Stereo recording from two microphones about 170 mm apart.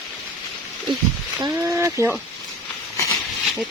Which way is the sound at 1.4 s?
15° right (ahead or behind).